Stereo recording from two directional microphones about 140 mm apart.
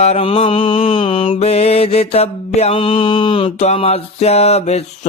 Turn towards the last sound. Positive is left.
turn(degrees=50)  # may be behind; listen again after turning